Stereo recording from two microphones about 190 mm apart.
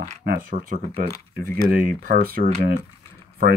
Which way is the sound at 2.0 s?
50° right (ahead or behind).